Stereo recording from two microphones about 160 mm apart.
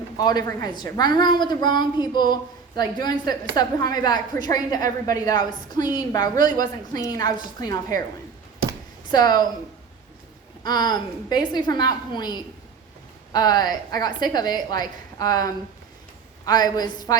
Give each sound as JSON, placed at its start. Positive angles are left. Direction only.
{"t": 0.2, "sound": "a woman's voice", "side_deg": 25}
{"t": 9.1, "sound": "a woman's voice", "side_deg": 25}
{"t": 10.6, "sound": "a woman's voice", "side_deg": 25}